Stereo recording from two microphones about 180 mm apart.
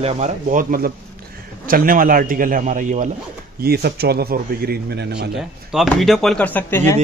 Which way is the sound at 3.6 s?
60° right (ahead or behind).